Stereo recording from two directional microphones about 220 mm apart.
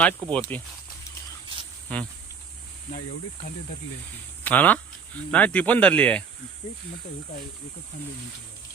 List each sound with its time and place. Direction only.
0.0 s speech: 5° left (ahead or behind)
1.9 s speech: 5° left (ahead or behind)
4.4 s speech: 5° left (ahead or behind)